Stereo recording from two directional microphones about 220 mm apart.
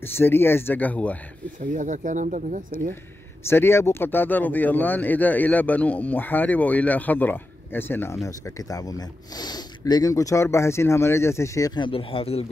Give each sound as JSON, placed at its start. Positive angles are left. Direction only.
{"t": 0.0, "sound": "speech", "side_deg": 10}
{"t": 1.6, "sound": "speech", "side_deg": -35}
{"t": 3.4, "sound": "speech", "side_deg": 10}